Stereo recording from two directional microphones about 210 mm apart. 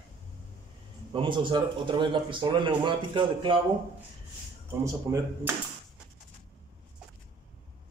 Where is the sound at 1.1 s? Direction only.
25° right (ahead or behind).